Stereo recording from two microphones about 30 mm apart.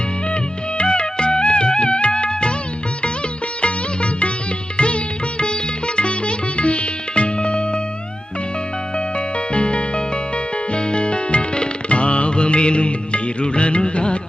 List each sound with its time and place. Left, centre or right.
0.8 s music: left
3.6 s music: left
6.0 s sitar: left
9.1 s music: left